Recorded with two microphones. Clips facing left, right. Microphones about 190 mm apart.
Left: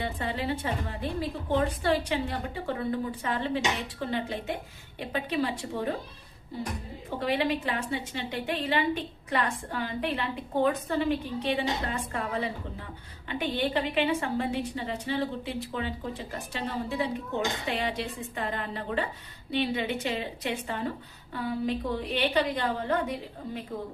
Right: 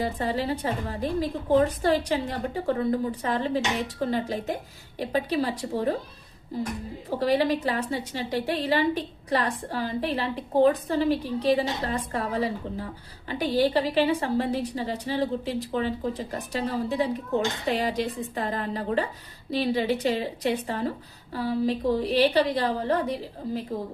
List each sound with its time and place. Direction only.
0.0 s a woman's voice: 40° right (ahead or behind)
7.1 s a woman's voice: 40° right (ahead or behind)